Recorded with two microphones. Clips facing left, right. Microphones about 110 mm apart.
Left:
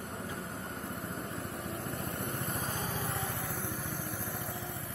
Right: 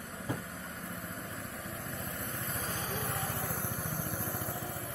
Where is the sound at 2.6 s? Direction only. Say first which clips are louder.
Left 1 dB; 45° left (ahead or behind).